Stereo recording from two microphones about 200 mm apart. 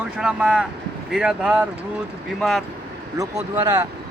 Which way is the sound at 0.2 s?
5° right (ahead or behind).